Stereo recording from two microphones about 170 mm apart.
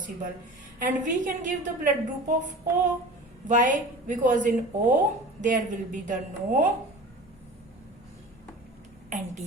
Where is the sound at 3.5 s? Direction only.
50° right (ahead or behind).